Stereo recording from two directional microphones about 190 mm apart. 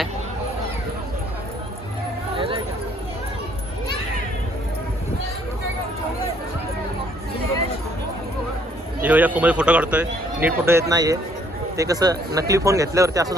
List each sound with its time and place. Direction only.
9.0 s speech: 10° right (ahead or behind)